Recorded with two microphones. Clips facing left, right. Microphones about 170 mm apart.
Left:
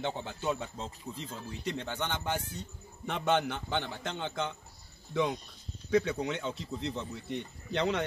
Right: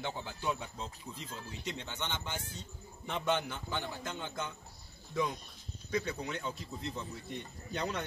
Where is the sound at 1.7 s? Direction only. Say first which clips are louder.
Left 5 dB; 50° left (ahead or behind); by 4.5 s 75° left (ahead or behind).